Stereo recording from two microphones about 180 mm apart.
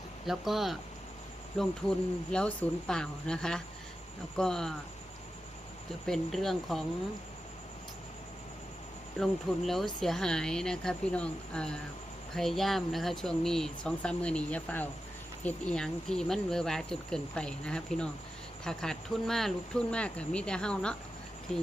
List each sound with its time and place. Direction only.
0.3 s speech: centre (ahead or behind)
6.1 s speech: centre (ahead or behind)
9.1 s speech: centre (ahead or behind)